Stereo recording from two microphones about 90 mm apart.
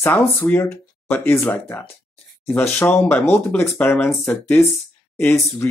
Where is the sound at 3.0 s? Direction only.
25° left (ahead or behind).